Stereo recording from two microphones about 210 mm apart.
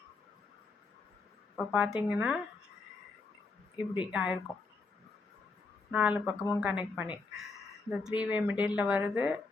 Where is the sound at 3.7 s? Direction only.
25° left (ahead or behind).